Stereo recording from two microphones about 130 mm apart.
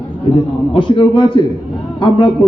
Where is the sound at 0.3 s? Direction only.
40° left (ahead or behind).